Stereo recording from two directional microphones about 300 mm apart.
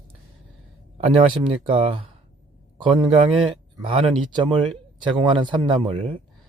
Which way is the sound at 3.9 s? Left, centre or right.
Centre.